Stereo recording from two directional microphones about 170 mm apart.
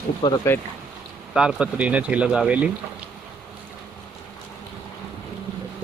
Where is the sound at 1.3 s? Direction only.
5° right (ahead or behind).